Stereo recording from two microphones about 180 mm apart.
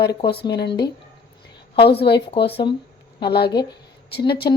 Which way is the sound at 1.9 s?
65° left (ahead or behind).